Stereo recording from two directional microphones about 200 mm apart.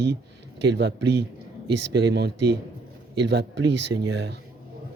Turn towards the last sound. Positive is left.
turn(degrees=-55)  # may be behind; listen again after turning